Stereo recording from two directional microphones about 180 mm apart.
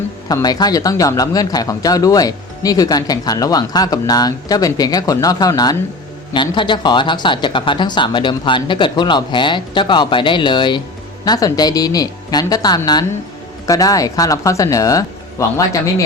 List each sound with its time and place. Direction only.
0.3 s speech: 20° left (ahead or behind)